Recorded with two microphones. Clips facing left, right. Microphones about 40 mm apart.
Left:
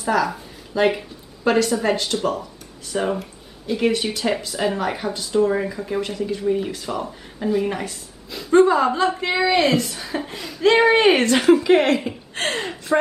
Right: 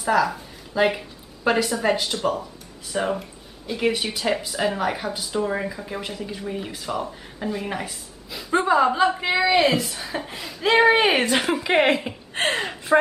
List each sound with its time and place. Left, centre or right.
0.0 s a woman's voice: centre; by 13.0 s right